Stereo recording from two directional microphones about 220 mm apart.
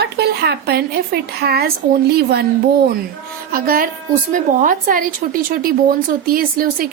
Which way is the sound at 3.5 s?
40° right (ahead or behind).